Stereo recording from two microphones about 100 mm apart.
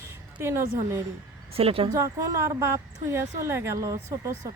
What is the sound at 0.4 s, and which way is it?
Speech, 25° right (ahead or behind).